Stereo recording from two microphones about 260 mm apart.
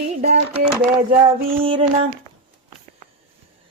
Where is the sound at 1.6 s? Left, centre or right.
Right.